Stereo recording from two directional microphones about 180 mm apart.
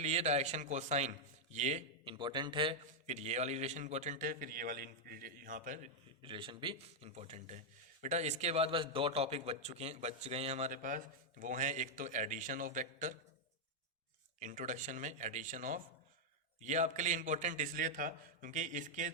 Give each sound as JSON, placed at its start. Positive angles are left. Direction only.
{"t": 0.0, "sound": "a man's voice", "side_deg": -35}
{"t": 2.1, "sound": "a man's voice", "side_deg": -25}
{"t": 3.1, "sound": "a man's voice", "side_deg": -40}
{"t": 6.2, "sound": "a man's voice", "side_deg": -30}
{"t": 14.3, "sound": "a man's voice", "side_deg": -45}